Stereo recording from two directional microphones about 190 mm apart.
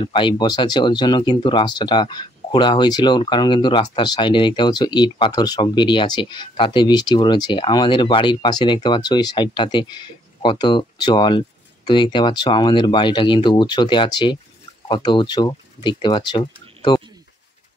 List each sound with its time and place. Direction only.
0.0 s speech: 25° left (ahead or behind)